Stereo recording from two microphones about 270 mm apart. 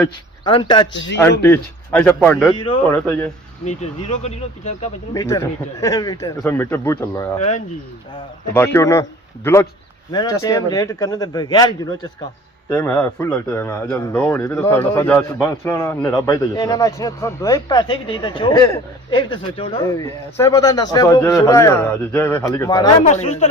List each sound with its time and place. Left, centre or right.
0.4 s speech: centre
1.5 s speech: centre
2.6 s speech: centre
5.2 s a man's voice: centre
23.0 s speech: left